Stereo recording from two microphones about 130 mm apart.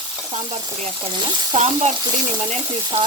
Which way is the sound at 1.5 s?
60° right (ahead or behind).